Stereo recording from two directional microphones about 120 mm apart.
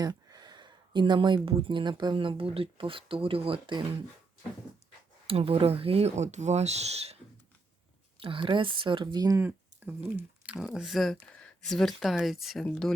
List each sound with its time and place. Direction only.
0.0 s a sound: 35° right (ahead or behind)
1.5 s speech: 50° right (ahead or behind)
5.2 s speech: 50° right (ahead or behind)
8.2 s speech: 45° right (ahead or behind)
9.4 s a sound: 15° right (ahead or behind)
10.2 s speech: 10° right (ahead or behind)